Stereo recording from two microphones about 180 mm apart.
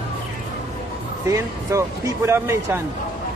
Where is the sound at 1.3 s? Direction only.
15° right (ahead or behind).